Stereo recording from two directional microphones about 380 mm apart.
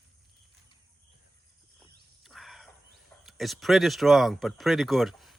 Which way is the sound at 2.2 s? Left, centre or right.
Centre.